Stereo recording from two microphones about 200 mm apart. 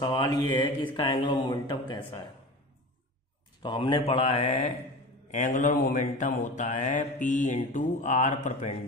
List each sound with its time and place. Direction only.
0.0 s speech: 20° left (ahead or behind)
3.6 s mantra: 25° left (ahead or behind)